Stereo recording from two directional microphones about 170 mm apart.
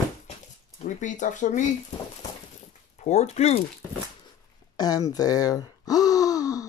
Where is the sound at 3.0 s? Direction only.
40° left (ahead or behind).